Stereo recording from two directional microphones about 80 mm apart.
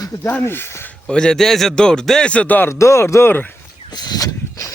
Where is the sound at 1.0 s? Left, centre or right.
Centre.